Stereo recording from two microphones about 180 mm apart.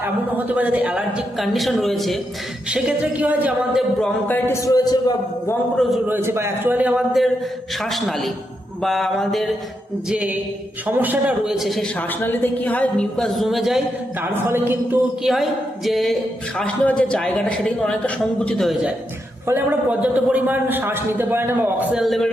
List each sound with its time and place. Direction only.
0.0 s a man's voice: 10° right (ahead or behind)
4.0 s a man's voice: 10° left (ahead or behind)
6.1 s a man's voice: 10° right (ahead or behind)
14.3 s a man's voice: 10° right (ahead or behind)
15.2 s a man's voice: centre (ahead or behind)